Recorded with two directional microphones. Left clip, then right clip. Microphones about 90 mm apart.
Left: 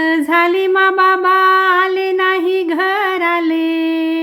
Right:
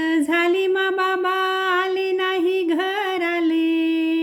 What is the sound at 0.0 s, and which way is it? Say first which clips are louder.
Female singing: left 6 dB; 20° right (ahead or behind).